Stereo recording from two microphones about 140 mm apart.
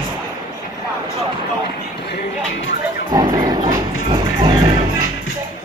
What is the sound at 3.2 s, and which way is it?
Dog, 35° right (ahead or behind).